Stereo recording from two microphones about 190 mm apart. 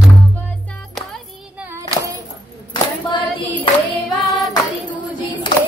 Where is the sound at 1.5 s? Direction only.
15° right (ahead or behind).